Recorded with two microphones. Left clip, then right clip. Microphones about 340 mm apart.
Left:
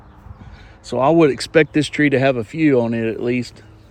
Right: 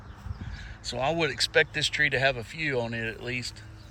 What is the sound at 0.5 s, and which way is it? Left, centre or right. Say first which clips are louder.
Speech: left 12 dB; centre.